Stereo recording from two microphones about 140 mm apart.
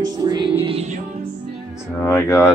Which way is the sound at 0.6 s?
50° right (ahead or behind).